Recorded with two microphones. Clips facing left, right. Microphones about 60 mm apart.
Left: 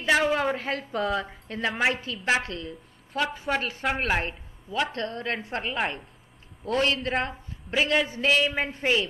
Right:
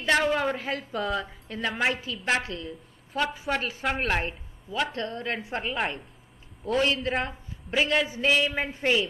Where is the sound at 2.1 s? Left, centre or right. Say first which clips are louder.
Left 2 dB; centre.